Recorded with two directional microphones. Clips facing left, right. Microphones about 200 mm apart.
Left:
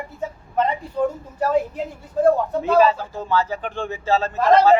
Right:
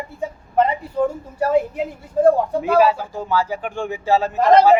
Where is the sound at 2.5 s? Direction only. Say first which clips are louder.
Right 1 dB; 10° right (ahead or behind).